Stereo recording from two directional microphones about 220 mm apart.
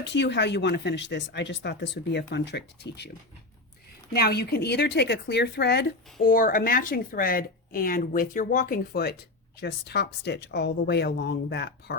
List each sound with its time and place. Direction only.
0.0 s speech: 55° left (ahead or behind)
4.1 s speech: 45° left (ahead or behind)